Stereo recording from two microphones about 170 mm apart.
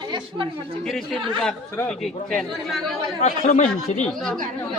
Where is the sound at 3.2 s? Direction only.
45° left (ahead or behind).